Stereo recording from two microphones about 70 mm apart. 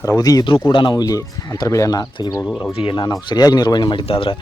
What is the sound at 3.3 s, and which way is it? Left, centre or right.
Speech, left.